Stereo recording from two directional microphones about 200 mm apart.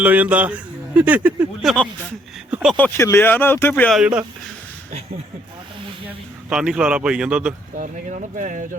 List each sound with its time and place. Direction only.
0.0 s a man's voice: 10° right (ahead or behind)
2.7 s speech: 10° left (ahead or behind)
4.9 s speech: 30° right (ahead or behind)
6.1 s speech: 5° right (ahead or behind)
7.8 s speech: 40° right (ahead or behind)